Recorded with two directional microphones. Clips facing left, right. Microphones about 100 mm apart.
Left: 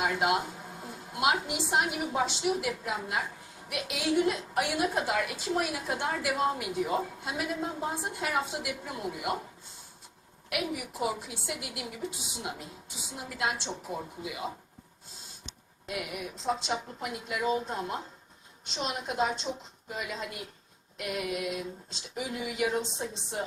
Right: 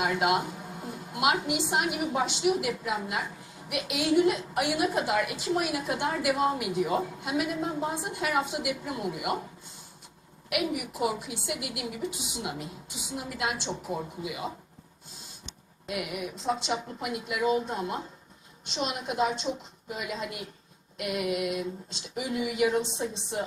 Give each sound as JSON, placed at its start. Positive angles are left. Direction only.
{"t": 0.0, "sound": "a woman's voice", "side_deg": -20}
{"t": 10.5, "sound": "a woman's voice", "side_deg": -15}
{"t": 15.9, "sound": "a woman's voice", "side_deg": -20}